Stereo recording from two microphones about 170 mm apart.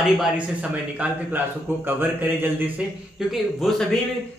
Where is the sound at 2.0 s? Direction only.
10° right (ahead or behind).